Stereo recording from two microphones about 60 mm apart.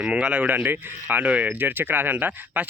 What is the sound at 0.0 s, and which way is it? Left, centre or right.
Speech, centre.